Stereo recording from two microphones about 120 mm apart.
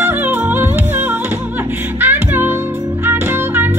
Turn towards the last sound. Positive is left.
turn(degrees=-20)  # may be behind; listen again after turning